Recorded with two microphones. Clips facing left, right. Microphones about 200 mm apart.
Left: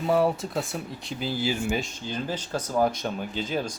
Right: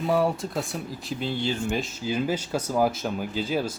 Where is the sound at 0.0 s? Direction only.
Centre (ahead or behind).